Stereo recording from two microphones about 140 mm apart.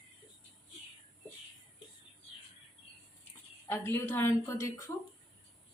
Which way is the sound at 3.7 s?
20° left (ahead or behind).